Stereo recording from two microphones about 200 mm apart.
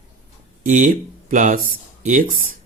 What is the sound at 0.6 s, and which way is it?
Speech, 40° right (ahead or behind).